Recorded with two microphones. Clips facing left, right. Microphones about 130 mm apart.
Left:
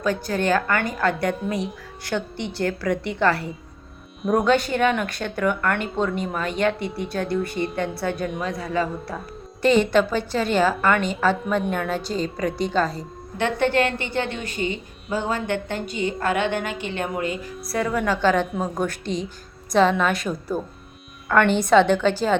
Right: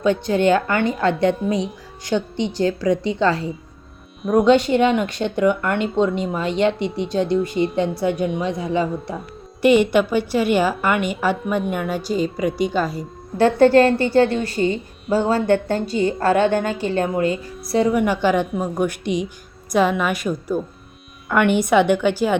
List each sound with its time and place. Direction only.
0.0 s speech: 25° right (ahead or behind)
4.2 s speech: centre (ahead or behind)
4.4 s a woman's voice: 25° right (ahead or behind)
13.3 s a woman's voice: 35° right (ahead or behind); by 18.4 s 15° right (ahead or behind)
18.5 s a woman's voice: 5° right (ahead or behind)
19.0 s speech: 60° right (ahead or behind)
19.7 s a woman's voice: 10° right (ahead or behind)